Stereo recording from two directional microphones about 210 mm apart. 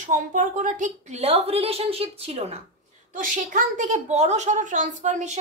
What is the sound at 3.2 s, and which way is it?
A woman's voice, 40° right (ahead or behind).